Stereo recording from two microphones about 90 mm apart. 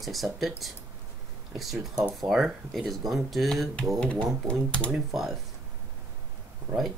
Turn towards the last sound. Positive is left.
turn(degrees=-25)  # may be behind; listen again after turning